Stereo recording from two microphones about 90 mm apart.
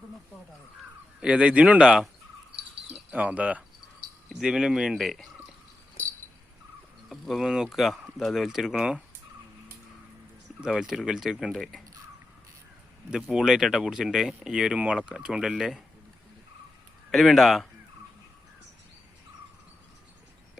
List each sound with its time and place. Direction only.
1.2 s speech: 10° right (ahead or behind)
3.1 s speech: 15° right (ahead or behind)
4.3 s speech: 5° right (ahead or behind)
6.0 s dog: 20° left (ahead or behind)
7.1 s speech: centre (ahead or behind)
10.6 s speech: 5° right (ahead or behind)
13.1 s speech: 10° right (ahead or behind)
17.1 s speech: centre (ahead or behind)